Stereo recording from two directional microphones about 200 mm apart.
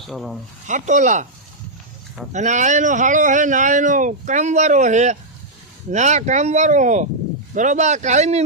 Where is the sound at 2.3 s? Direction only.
35° right (ahead or behind).